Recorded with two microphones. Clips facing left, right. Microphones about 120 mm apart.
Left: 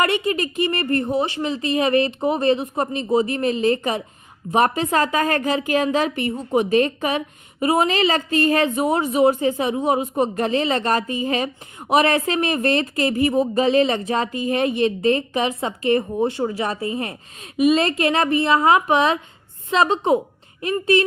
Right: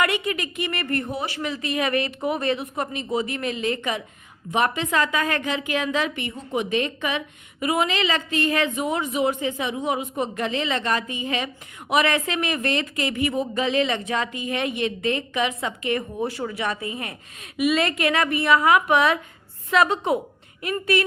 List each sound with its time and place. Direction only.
0.0 s a woman's voice: 30° left (ahead or behind)